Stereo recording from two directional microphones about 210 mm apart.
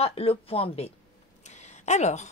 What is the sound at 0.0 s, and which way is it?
A woman's voice, 30° left (ahead or behind).